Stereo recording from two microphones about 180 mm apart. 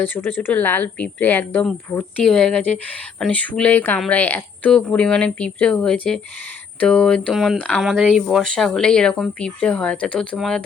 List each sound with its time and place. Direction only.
0.0 s a woman's voice: 10° left (ahead or behind)